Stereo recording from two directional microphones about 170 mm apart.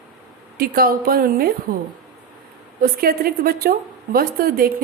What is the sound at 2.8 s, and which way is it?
A woman's voice, 60° right (ahead or behind).